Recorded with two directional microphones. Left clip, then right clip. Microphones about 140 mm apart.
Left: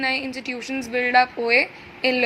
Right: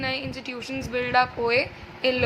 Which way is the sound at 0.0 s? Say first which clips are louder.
Left 5 dB; 25° left (ahead or behind).